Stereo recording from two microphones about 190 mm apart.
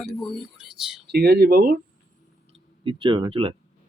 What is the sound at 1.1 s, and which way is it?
Speech, 60° right (ahead or behind).